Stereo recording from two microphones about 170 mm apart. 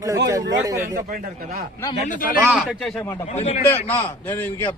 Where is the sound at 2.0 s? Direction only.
50° left (ahead or behind).